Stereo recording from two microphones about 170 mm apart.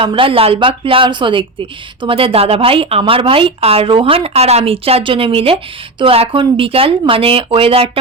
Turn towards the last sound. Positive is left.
turn(degrees=-35)  # may be behind; listen again after turning